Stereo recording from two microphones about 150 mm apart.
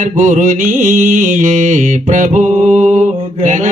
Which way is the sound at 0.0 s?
55° right (ahead or behind).